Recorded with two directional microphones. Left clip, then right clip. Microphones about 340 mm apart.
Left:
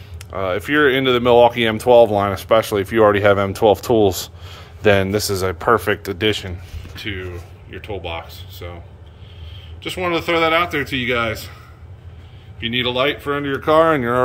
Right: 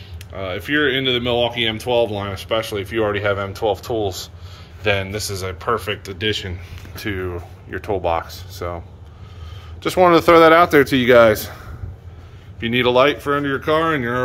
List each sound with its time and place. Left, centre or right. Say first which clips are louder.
0.3 s speech: left 3 dB; centre
7.0 s speech: right 3 dB; centre
9.8 s speech: right 8 dB; centre
12.7 s speech: right 4 dB; centre